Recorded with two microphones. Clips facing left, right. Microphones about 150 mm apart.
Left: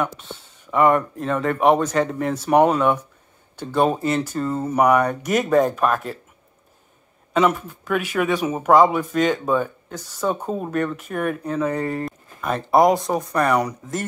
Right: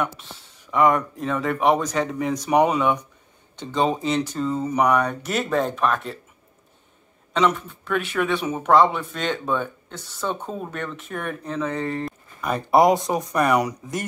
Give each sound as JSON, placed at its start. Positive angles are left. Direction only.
{"t": 0.0, "sound": "speech", "side_deg": 0}
{"t": 7.3, "sound": "speech", "side_deg": 5}
{"t": 13.6, "sound": "speech", "side_deg": -20}